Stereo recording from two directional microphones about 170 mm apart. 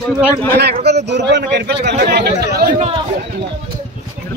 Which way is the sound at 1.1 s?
90° right.